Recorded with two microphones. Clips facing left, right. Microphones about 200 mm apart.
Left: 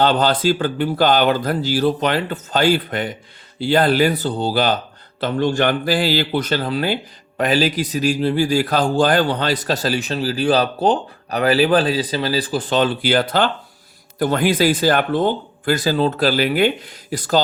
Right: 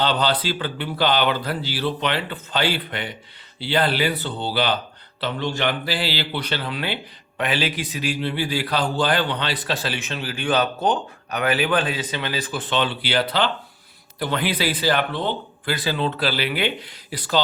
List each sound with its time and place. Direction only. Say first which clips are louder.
0.0 s speech: left 5 dB; 45° left (ahead or behind)